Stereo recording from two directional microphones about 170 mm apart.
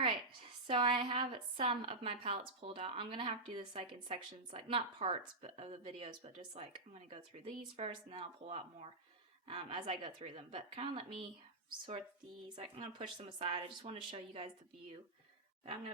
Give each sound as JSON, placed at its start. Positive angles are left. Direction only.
{"t": 0.7, "sound": "a woman's voice", "side_deg": -30}
{"t": 12.5, "sound": "a woman's voice", "side_deg": -30}
{"t": 15.6, "sound": "a woman's voice", "side_deg": -30}